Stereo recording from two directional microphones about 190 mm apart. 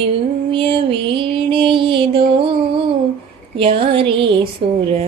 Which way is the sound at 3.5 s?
30° right (ahead or behind).